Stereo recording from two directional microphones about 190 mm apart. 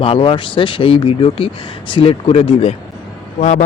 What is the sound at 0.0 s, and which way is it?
Speech, 30° left (ahead or behind).